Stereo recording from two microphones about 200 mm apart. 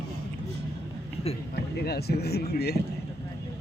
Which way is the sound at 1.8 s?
50° left (ahead or behind).